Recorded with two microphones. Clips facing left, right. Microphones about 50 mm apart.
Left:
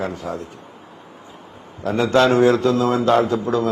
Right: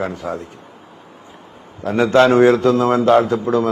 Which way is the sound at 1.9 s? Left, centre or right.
Right.